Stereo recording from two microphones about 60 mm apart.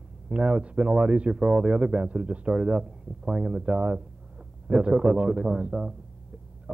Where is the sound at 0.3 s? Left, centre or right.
Centre.